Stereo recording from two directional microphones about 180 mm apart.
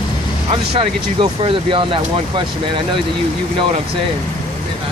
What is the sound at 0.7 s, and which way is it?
Speech, 30° right (ahead or behind).